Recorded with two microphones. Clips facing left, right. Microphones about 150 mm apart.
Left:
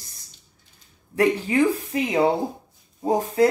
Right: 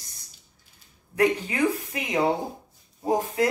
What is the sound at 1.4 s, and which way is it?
Speech, 30° left (ahead or behind).